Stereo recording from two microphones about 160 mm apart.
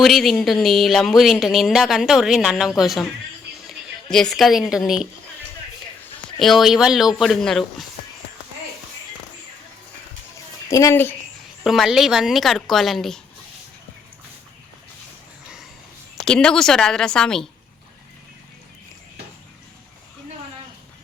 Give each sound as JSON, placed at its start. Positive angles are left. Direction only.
{"t": 0.0, "sound": "speech", "side_deg": 0}
{"t": 6.4, "sound": "speech", "side_deg": 0}
{"t": 10.7, "sound": "speech", "side_deg": 20}
{"t": 11.6, "sound": "speech", "side_deg": 0}
{"t": 16.2, "sound": "speech", "side_deg": 5}